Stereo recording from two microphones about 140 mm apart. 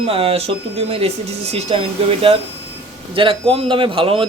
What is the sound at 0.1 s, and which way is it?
Speech, 45° right (ahead or behind).